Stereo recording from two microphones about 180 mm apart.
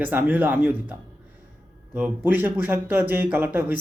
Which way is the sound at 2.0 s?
10° right (ahead or behind).